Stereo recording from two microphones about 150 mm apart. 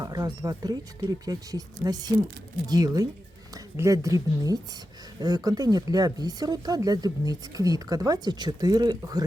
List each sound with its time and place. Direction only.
0.0 s speech: 25° right (ahead or behind)